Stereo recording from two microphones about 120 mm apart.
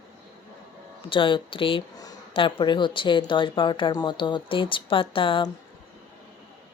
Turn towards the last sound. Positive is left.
turn(degrees=45)  # may be behind; listen again after turning